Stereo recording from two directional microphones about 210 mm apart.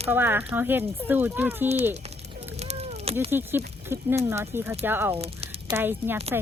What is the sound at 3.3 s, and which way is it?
Speech, 10° right (ahead or behind).